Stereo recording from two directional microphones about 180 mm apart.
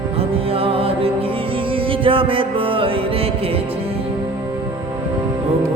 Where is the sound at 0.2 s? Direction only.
30° right (ahead or behind).